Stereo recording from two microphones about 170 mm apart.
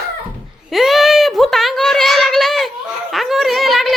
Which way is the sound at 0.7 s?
Centre (ahead or behind).